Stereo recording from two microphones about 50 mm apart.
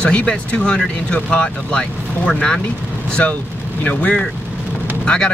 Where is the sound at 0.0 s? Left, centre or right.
Left.